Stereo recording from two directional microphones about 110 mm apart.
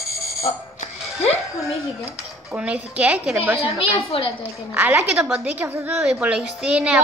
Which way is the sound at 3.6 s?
55° left (ahead or behind).